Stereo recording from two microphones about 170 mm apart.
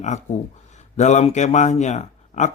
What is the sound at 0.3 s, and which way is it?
Speech, 45° left (ahead or behind).